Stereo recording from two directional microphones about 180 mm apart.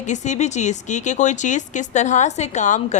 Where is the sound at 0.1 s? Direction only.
40° left (ahead or behind).